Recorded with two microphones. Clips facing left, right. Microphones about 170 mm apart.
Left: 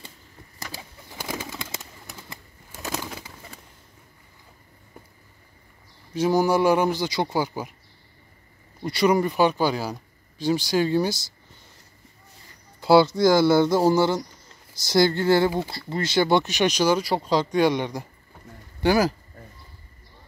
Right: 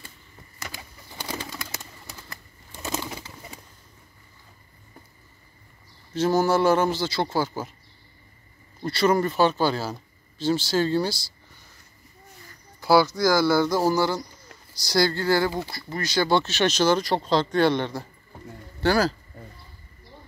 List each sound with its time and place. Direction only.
1.3 s bird: 5° left (ahead or behind)
2.7 s bird: centre (ahead or behind)
6.1 s speech: 15° left (ahead or behind)
8.8 s speech: 15° left (ahead or behind)
12.8 s speech: 25° left (ahead or behind)